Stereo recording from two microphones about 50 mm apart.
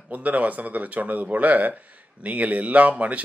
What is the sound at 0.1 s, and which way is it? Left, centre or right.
Speech, right.